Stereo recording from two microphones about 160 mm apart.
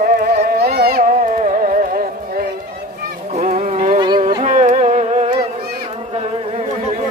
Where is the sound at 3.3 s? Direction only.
45° right (ahead or behind).